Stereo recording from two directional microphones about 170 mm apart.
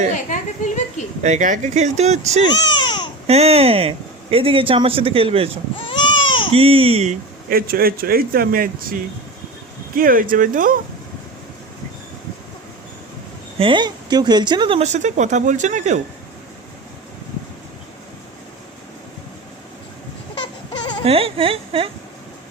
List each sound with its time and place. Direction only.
0.3 s speech: 45° left (ahead or behind)
1.2 s speech: 45° right (ahead or behind)
2.5 s speech: 25° left (ahead or behind)
3.2 s speech: 40° right (ahead or behind)
6.2 s baby cry: 30° left (ahead or behind)
6.5 s speech: 35° right (ahead or behind)
7.5 s speech: 60° right (ahead or behind)
13.6 s speech: 30° right (ahead or behind)
14.8 s speech: 45° right (ahead or behind)
20.4 s a sound: 25° left (ahead or behind)
21.0 s speech: 35° right (ahead or behind)